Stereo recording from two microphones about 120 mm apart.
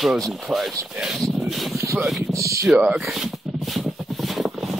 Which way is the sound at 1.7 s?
25° right (ahead or behind).